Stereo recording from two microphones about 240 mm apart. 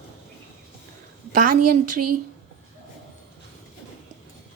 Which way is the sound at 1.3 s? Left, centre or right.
Right.